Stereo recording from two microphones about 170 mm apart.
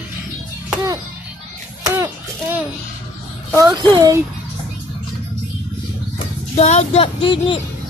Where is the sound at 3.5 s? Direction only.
20° right (ahead or behind).